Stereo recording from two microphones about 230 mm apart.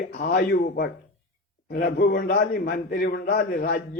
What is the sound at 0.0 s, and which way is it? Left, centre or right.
A man's voice, left.